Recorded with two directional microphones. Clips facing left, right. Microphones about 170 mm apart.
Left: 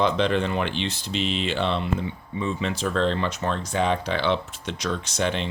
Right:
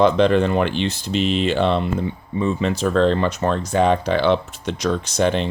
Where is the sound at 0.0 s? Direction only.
45° right (ahead or behind).